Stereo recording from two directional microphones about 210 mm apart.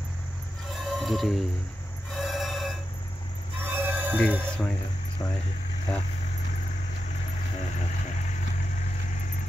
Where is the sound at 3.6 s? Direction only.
10° right (ahead or behind).